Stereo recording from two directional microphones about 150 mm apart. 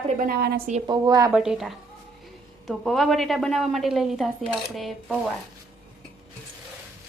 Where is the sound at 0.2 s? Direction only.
90° right.